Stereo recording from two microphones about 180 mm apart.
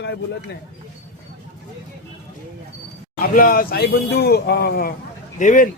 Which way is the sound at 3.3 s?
50° left (ahead or behind).